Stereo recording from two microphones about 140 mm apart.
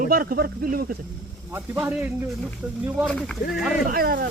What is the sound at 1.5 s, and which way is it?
Speech, 15° right (ahead or behind).